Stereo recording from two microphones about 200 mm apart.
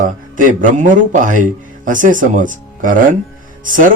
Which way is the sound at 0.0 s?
40° right (ahead or behind).